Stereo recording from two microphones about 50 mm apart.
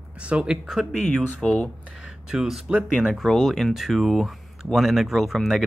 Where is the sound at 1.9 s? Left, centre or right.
Centre.